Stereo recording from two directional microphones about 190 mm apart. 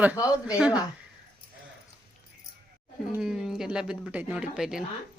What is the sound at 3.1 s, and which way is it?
Speech, centre (ahead or behind).